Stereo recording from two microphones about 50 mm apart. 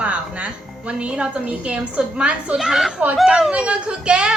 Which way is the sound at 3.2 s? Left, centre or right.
Centre.